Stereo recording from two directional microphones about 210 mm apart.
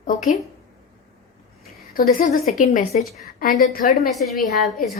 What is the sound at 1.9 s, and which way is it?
A woman's voice, 40° left (ahead or behind).